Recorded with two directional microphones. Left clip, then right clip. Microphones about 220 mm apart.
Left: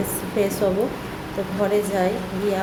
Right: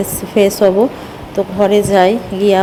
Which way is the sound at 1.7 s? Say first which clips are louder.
Right 12 dB; 35° right (ahead or behind).